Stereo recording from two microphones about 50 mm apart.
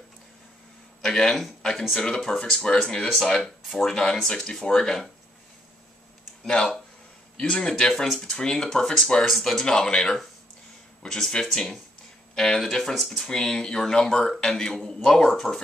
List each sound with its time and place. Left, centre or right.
1.0 s a man's voice: centre
3.4 s speech: centre
6.4 s speech: centre
15.2 s speech: centre